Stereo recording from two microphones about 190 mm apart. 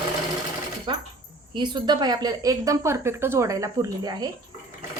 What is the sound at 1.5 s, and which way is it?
A woman's voice, 25° right (ahead or behind).